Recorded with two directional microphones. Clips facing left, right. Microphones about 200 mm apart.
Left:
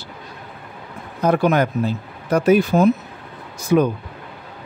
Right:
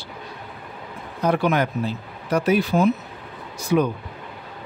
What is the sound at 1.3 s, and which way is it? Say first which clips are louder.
A man's voice: left 4 dB; 45° left (ahead or behind).